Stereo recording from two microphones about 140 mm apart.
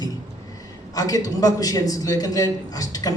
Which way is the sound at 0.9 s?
25° left (ahead or behind).